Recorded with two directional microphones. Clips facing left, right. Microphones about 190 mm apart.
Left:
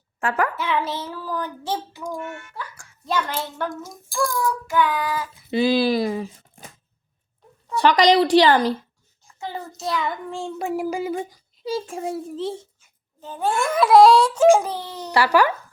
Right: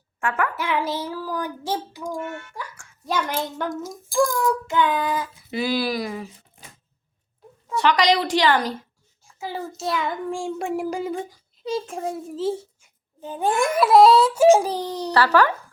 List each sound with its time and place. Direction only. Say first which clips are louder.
0.2 s a woman's voice: left 2 dB; 35° left (ahead or behind)
0.5 s speech: even; 10° right (ahead or behind)
4.6 s child singing: even; 20° right (ahead or behind)
5.5 s speech: left 6 dB; 25° left (ahead or behind)
7.8 s a woman's voice: left 3 dB; 35° left (ahead or behind)
9.2 s a child's voice: right 2 dB; 5° right (ahead or behind)
13.2 s speech: right 1 dB; 15° right (ahead or behind)
13.8 s a child's voice: left 1 dB; centre (ahead or behind)
14.6 s speech: right 4 dB; 15° right (ahead or behind)
15.1 s speech: even; 10° left (ahead or behind)